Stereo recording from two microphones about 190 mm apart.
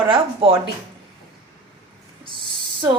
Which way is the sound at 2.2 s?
25° right (ahead or behind).